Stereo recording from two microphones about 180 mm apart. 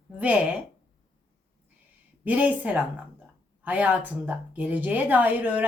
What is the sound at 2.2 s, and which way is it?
Speech, 10° right (ahead or behind).